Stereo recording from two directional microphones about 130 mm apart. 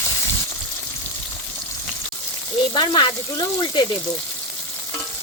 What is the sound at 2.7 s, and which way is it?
Speech, 35° left (ahead or behind).